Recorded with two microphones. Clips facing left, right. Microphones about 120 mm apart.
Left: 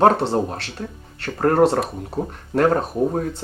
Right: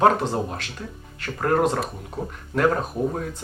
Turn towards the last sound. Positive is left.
turn(degrees=35)  # may be behind; listen again after turning